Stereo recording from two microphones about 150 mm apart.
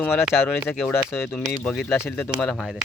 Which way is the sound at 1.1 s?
15° left (ahead or behind).